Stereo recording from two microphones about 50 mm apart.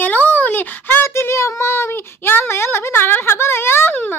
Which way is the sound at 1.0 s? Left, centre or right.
Left.